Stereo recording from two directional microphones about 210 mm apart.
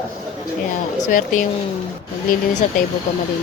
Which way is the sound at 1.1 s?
40° left (ahead or behind).